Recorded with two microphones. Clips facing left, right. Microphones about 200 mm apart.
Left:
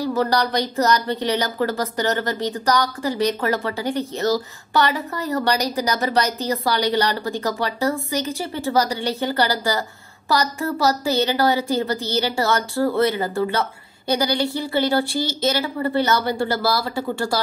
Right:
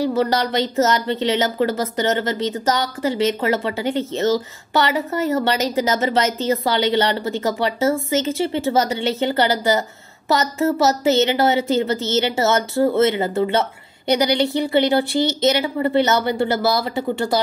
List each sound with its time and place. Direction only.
0.0 s a woman's voice: 20° right (ahead or behind)